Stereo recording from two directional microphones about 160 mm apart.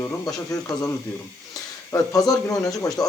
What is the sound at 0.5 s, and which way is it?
Speech, 20° left (ahead or behind).